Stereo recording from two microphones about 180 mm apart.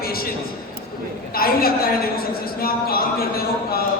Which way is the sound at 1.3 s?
55° left (ahead or behind).